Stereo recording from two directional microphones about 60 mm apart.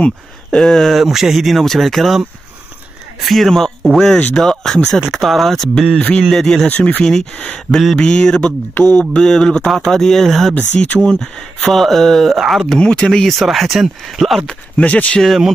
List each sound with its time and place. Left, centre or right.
0.0 s speech: centre
1.0 s speech: centre
5.9 s speech: left
6.3 s mantra: centre
6.7 s speech: left
7.0 s mantra: centre
9.8 s speech: centre
12.7 s speech: centre
14.4 s speech: centre
15.2 s speech: centre